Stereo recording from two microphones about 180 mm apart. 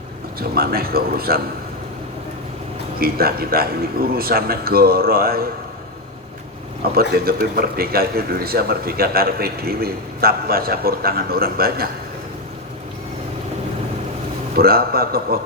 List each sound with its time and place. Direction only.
0.3 s a man's voice: 60° right (ahead or behind)
3.0 s a man's voice: 55° right (ahead or behind)
6.9 s a man's voice: 55° right (ahead or behind)
14.5 s a man's voice: 55° right (ahead or behind)